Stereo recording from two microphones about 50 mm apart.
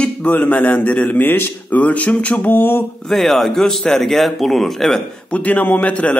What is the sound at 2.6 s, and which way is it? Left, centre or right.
Speech, left.